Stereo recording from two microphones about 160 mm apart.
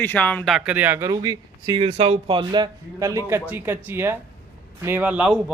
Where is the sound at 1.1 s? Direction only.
25° right (ahead or behind); by 5.5 s 5° right (ahead or behind).